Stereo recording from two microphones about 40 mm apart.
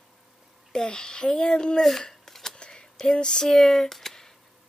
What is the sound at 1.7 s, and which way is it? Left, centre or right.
Speech, centre.